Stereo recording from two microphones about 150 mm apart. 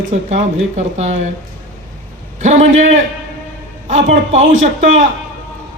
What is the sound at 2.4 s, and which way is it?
A man's voice, 50° right (ahead or behind).